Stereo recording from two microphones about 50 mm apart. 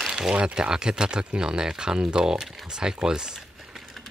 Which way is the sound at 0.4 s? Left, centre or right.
Right.